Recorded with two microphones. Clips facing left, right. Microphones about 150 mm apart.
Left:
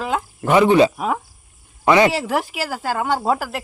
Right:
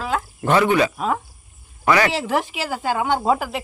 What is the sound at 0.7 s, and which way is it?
Speech, 30° left (ahead or behind).